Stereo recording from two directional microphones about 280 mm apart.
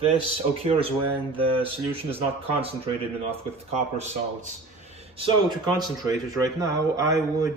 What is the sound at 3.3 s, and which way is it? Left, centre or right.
Speech, right.